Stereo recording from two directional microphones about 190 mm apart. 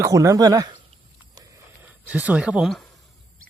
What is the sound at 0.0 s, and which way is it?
Speech, 15° right (ahead or behind).